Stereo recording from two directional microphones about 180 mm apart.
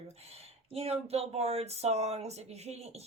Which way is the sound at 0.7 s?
35° right (ahead or behind).